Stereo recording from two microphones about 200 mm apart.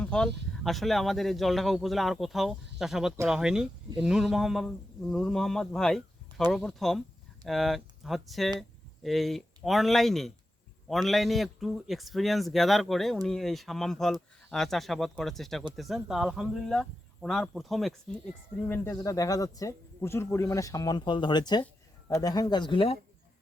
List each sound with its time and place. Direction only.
0.0 s a sound: 5° left (ahead or behind)
0.6 s speech: centre (ahead or behind)
18.6 s speech: 10° left (ahead or behind)